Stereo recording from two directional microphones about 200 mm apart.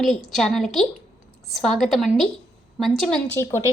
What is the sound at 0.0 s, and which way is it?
A woman's voice, centre (ahead or behind).